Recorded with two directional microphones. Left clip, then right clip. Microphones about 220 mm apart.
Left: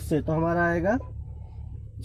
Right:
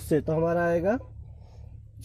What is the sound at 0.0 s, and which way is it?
Speech, 40° right (ahead or behind).